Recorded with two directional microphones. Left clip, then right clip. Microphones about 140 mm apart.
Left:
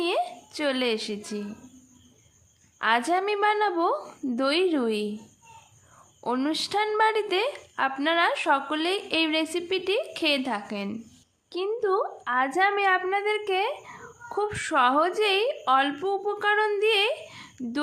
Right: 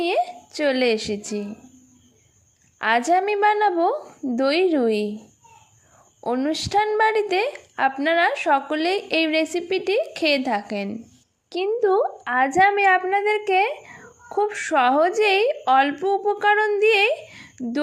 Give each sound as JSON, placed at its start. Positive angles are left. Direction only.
{"t": 0.0, "sound": "a woman's voice", "side_deg": -25}
{"t": 2.7, "sound": "a woman's voice", "side_deg": -25}
{"t": 6.2, "sound": "a woman's voice", "side_deg": -15}